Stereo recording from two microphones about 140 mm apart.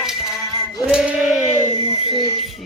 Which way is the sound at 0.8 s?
5° right (ahead or behind).